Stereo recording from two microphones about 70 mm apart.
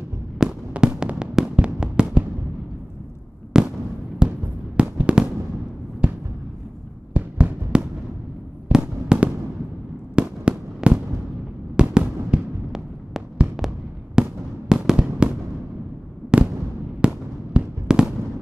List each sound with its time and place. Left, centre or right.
0.4 s fireworks: centre
3.5 s fireworks: centre
4.2 s a sound: centre
4.7 s fireworks: centre
6.0 s a sound: centre
7.2 s music: centre
8.6 s fireworks: centre
12.3 s a sound: centre
13.6 s fireworks: centre